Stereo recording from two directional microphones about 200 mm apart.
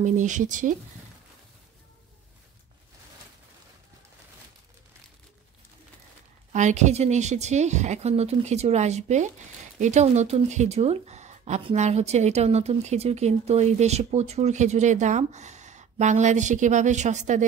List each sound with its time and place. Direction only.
0.0 s speech: 40° right (ahead or behind)
6.5 s speech: 35° right (ahead or behind)